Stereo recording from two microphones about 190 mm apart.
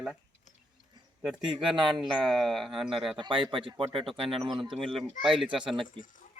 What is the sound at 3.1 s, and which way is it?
Speech, 25° right (ahead or behind).